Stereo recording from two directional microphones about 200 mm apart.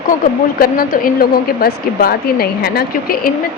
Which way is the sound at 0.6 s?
45° left (ahead or behind).